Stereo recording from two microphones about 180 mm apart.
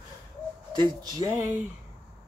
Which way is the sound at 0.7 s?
25° right (ahead or behind).